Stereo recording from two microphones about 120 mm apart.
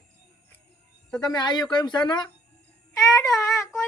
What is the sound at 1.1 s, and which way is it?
Speech, 35° left (ahead or behind).